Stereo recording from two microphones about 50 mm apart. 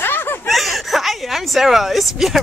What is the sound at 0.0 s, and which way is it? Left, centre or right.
Snicker, left.